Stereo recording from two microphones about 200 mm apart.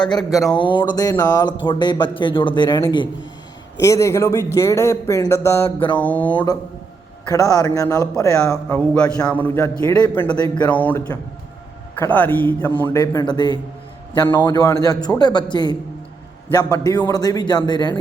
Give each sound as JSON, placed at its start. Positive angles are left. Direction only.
{"t": 0.0, "sound": "a man's voice", "side_deg": 20}
{"t": 0.3, "sound": "speech", "side_deg": 0}
{"t": 0.6, "sound": "a man's voice", "side_deg": 25}
{"t": 6.3, "sound": "a man's voice", "side_deg": 20}
{"t": 16.7, "sound": "a man's voice", "side_deg": 15}